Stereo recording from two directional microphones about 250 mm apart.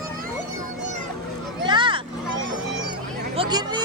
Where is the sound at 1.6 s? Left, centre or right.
Centre.